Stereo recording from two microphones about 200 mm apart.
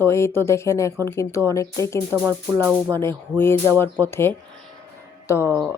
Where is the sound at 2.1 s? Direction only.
15° right (ahead or behind).